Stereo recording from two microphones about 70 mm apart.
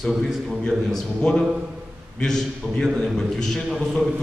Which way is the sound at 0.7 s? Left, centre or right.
Centre.